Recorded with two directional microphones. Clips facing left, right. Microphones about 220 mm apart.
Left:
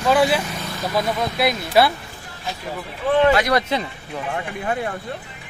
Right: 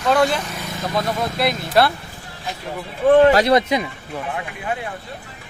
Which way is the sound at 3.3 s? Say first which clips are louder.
Right 3 dB; 25° right (ahead or behind).